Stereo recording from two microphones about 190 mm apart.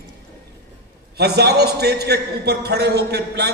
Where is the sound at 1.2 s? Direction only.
60° right (ahead or behind).